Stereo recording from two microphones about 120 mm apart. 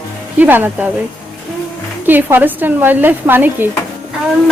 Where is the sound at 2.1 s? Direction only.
15° right (ahead or behind).